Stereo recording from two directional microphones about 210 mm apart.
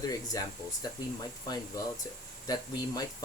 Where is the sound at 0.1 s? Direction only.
15° left (ahead or behind).